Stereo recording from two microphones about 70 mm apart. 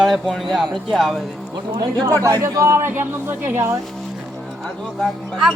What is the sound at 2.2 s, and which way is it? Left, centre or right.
A man's voice, right.